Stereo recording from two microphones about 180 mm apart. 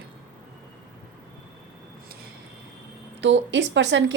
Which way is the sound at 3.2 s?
90° right.